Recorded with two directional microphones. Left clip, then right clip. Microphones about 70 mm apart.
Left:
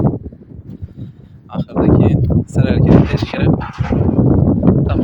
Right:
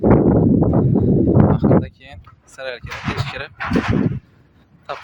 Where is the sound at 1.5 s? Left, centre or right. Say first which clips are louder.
Left 2 dB; right.